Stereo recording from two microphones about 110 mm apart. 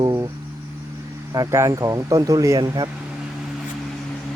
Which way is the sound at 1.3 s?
30° right (ahead or behind).